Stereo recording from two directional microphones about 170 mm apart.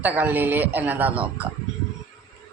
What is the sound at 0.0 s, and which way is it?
A woman's voice, 10° right (ahead or behind).